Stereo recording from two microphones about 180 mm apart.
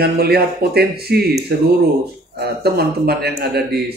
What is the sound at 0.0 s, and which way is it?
Speech, 60° right (ahead or behind).